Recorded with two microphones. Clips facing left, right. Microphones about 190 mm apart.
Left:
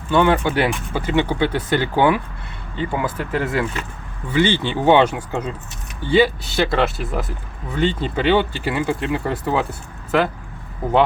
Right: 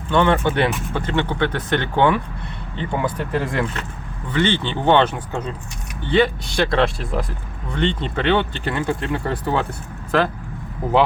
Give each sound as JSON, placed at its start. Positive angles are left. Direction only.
{"t": 0.1, "sound": "speech", "side_deg": 5}